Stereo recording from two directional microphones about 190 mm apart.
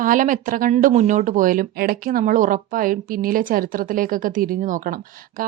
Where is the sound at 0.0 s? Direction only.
45° right (ahead or behind).